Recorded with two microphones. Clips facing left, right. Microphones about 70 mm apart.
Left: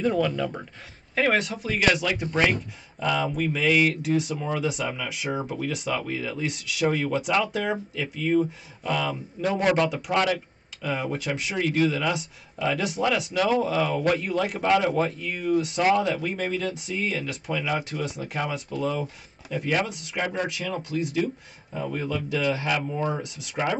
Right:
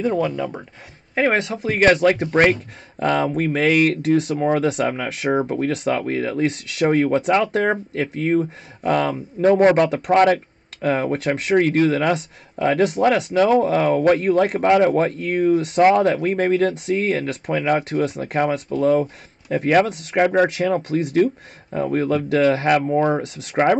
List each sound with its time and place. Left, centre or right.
0.1 s speech: right
1.3 s speech: right